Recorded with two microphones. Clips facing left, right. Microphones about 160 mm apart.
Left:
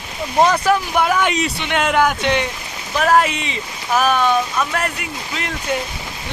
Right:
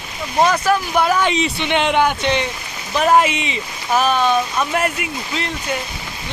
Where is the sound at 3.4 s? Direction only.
5° right (ahead or behind).